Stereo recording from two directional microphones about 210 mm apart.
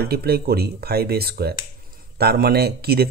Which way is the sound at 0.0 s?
50° right (ahead or behind).